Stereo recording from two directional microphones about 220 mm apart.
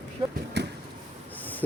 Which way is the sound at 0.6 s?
50° right (ahead or behind).